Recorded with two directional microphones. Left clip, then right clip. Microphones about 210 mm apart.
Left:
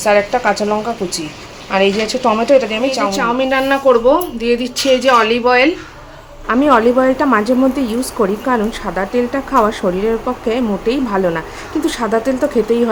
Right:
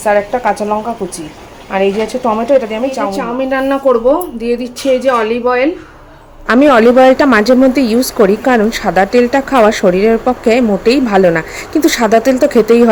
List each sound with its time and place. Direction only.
0.0 s a woman's voice: centre (ahead or behind)
6.5 s a woman's voice: 25° right (ahead or behind)